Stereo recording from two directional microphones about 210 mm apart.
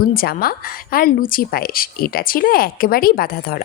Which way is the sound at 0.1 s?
45° left (ahead or behind).